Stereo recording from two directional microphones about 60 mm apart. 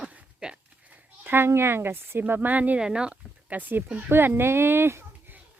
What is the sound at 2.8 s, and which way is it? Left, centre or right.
Speech, centre.